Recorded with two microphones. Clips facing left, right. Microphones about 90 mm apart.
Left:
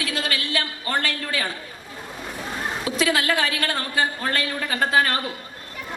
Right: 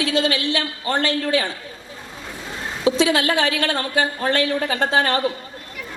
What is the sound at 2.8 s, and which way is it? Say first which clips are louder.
A woman's voice: right 6 dB; 25° right (ahead or behind).